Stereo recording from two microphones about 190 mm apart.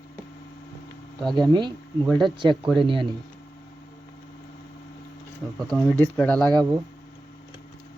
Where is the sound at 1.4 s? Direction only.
25° right (ahead or behind).